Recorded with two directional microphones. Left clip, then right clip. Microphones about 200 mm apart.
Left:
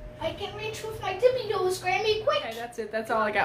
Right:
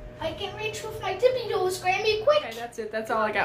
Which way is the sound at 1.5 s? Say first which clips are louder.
Right 1 dB; centre (ahead or behind).